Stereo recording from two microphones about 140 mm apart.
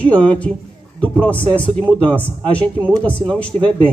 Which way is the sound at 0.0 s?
10° left (ahead or behind).